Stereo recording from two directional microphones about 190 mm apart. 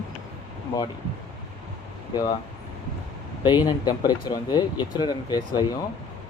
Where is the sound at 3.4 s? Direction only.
20° left (ahead or behind).